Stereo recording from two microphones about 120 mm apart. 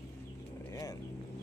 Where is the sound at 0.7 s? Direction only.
30° left (ahead or behind).